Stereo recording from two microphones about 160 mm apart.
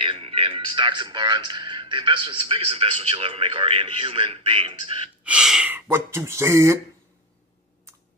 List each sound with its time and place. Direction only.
0.0 s speech: 35° right (ahead or behind)
5.2 s speech: 5° right (ahead or behind)